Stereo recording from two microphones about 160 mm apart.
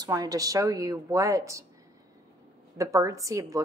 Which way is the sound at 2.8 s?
20° right (ahead or behind).